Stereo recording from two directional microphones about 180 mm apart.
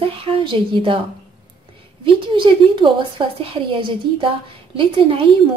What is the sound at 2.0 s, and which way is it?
A woman's voice, 25° right (ahead or behind).